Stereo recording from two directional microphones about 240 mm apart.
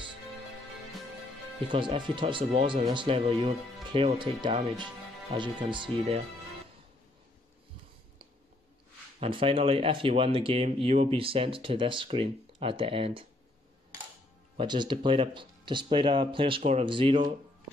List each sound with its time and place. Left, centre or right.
1.7 s speech: centre
9.2 s speech: right
14.6 s speech: centre